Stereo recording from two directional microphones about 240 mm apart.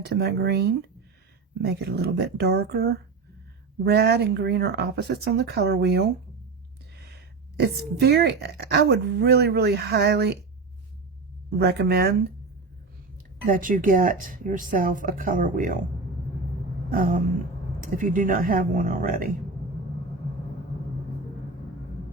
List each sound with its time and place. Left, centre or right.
0.0 s speech: right
8.0 s speech: right
11.6 s speech: right
13.5 s speech: right
16.9 s speech: right